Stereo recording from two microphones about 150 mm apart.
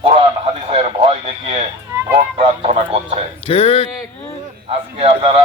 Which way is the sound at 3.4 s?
40° left (ahead or behind).